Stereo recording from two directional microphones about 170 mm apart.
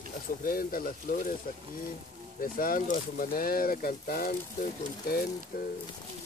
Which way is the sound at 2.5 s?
55° left (ahead or behind).